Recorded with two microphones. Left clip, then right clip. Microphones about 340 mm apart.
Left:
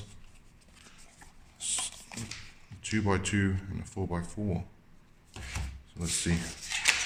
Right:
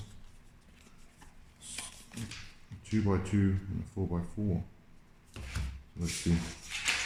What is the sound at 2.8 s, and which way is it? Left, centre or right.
Speech, left.